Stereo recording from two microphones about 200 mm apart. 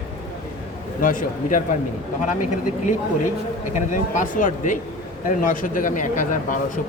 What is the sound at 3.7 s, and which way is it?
Speech, 40° left (ahead or behind).